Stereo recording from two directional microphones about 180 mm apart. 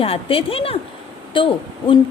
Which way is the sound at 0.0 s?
30° left (ahead or behind).